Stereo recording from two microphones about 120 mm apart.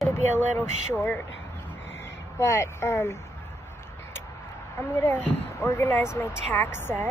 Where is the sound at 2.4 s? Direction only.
20° left (ahead or behind).